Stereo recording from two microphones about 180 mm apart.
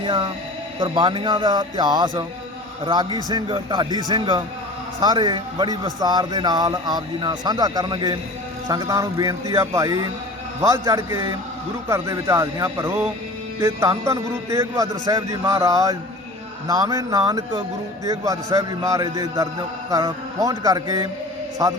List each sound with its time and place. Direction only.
0.0 s a man's voice: 25° right (ahead or behind)